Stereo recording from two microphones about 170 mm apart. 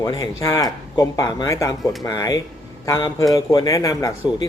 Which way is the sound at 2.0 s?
20° left (ahead or behind).